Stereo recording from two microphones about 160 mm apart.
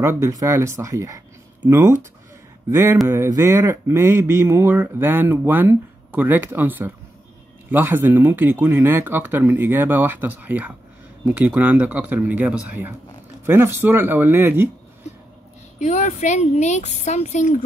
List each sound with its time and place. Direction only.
0.0 s speech: 15° right (ahead or behind)
15.8 s speech: 50° left (ahead or behind)